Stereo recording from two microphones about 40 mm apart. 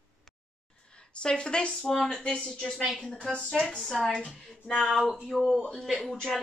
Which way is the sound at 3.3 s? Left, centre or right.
Left.